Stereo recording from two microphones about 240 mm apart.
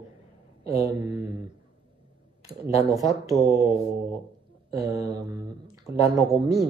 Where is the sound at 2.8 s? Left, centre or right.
Centre.